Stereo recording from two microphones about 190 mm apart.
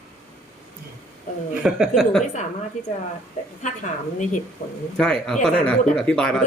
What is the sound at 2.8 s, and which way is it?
Speech, 35° left (ahead or behind).